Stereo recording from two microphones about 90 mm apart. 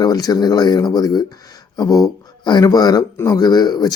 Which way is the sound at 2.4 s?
55° left (ahead or behind).